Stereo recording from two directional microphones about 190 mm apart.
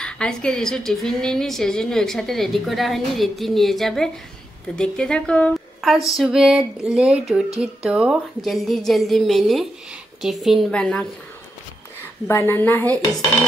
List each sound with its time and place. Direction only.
0.0 s a woman's voice: 5° left (ahead or behind)
12.3 s a woman's voice: 10° left (ahead or behind)